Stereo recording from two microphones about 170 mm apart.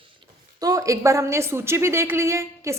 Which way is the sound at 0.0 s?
30° right (ahead or behind).